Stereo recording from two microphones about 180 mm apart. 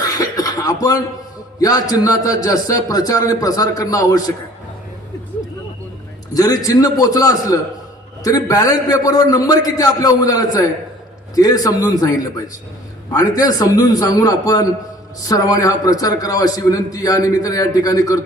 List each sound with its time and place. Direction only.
0.0 s throat clearing: 20° left (ahead or behind)
1.5 s a man's voice: 20° left (ahead or behind)
6.3 s a man's voice: 20° left (ahead or behind)
13.1 s a man's voice: 20° left (ahead or behind)